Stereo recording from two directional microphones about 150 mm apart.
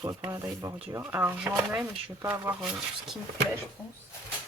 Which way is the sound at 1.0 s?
10° right (ahead or behind).